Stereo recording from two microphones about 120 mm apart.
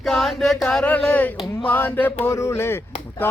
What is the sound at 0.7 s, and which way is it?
Speech, 10° left (ahead or behind).